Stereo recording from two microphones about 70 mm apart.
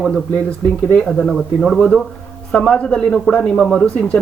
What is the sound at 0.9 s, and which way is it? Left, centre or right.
Speech, centre.